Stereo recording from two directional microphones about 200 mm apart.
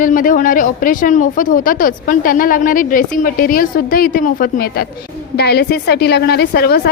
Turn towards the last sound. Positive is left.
turn(degrees=50)  # may be behind; listen again after turning